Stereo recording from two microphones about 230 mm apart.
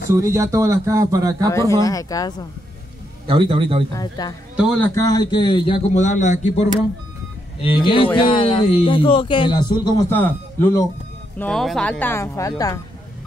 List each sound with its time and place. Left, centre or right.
0.1 s speech: centre
1.5 s speech: centre
3.3 s a man's voice: right
3.9 s a man's voice: centre; by 6.6 s left
7.6 s a man's voice: left